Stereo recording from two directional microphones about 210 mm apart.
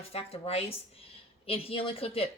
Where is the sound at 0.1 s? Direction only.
30° left (ahead or behind).